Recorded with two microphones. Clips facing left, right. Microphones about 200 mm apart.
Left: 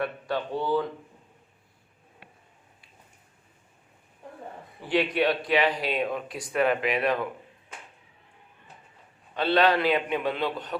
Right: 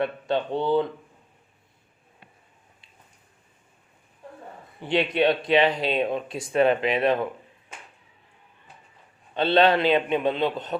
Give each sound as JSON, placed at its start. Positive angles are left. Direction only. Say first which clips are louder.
{"t": 0.0, "sound": "speech", "louder": "right 4 dB", "side_deg": -25}
{"t": 4.8, "sound": "speech", "louder": "right 2 dB", "side_deg": -25}
{"t": 9.3, "sound": "speech", "louder": "right 3 dB", "side_deg": -25}